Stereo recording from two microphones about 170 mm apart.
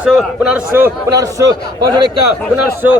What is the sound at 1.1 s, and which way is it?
Speech, 20° right (ahead or behind).